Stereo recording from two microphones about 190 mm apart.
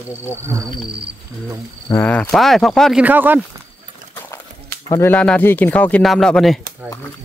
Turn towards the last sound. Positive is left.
turn(degrees=0)  # may be behind; listen again after turning